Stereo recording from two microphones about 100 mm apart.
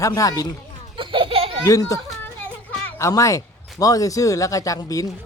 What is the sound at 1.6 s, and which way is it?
Speech, 35° left (ahead or behind).